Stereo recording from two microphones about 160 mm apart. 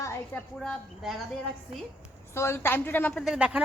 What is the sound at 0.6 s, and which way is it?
Speech, centre (ahead or behind).